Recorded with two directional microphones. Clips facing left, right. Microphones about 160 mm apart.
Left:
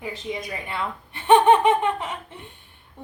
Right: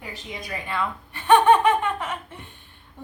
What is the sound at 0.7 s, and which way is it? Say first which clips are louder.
A woman's voice: right 5 dB; 20° left (ahead or behind).